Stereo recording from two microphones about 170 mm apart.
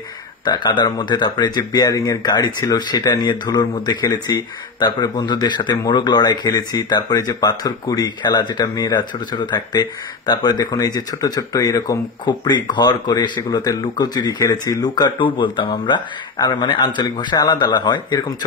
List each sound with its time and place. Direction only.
0.5 s speech: 25° left (ahead or behind)